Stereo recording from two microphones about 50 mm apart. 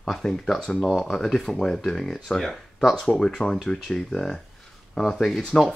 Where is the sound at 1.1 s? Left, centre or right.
Centre.